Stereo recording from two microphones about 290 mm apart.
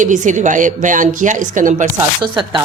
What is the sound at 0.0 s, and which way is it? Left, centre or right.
A woman's voice, right.